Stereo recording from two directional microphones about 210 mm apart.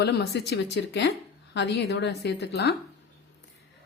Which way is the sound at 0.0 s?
50° left (ahead or behind).